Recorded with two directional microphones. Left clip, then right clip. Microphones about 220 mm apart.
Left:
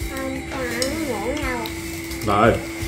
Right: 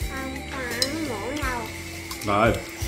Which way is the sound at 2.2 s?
30° right (ahead or behind).